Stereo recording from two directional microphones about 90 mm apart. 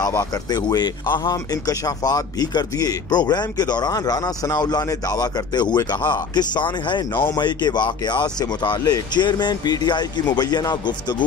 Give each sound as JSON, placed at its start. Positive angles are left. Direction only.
{"t": 0.2, "sound": "speech", "side_deg": 50}